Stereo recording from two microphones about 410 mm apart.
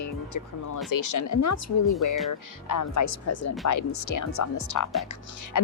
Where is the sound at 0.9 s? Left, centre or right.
Left.